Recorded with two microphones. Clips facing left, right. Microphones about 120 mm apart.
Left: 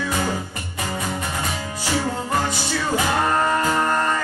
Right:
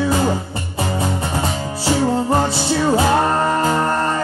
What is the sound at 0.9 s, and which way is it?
Music, 30° right (ahead or behind).